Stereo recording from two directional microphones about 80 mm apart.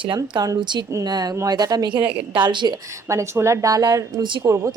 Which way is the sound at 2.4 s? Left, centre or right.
Right.